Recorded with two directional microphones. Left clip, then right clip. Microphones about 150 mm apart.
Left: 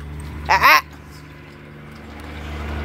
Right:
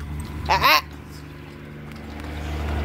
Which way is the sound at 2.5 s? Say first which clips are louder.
Even; 40° left (ahead or behind).